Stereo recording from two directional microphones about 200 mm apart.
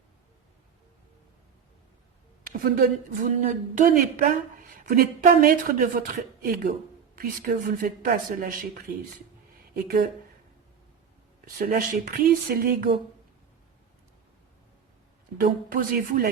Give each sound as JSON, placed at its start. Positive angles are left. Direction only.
{"t": 2.5, "sound": "speech", "side_deg": -45}
{"t": 9.7, "sound": "speech", "side_deg": -45}
{"t": 11.4, "sound": "speech", "side_deg": -45}
{"t": 15.4, "sound": "speech", "side_deg": -45}